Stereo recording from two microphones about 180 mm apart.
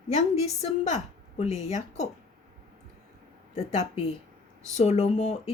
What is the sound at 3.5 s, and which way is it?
A woman's voice, 35° left (ahead or behind).